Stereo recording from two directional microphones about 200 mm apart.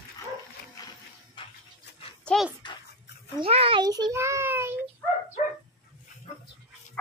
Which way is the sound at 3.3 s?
30° right (ahead or behind).